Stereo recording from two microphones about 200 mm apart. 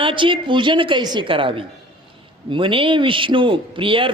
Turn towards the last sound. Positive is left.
turn(degrees=-25)  # may be behind; listen again after turning